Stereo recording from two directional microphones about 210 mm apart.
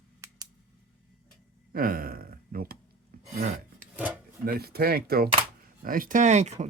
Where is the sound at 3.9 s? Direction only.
10° right (ahead or behind).